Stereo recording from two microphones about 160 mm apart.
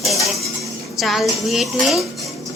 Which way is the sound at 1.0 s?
Centre (ahead or behind).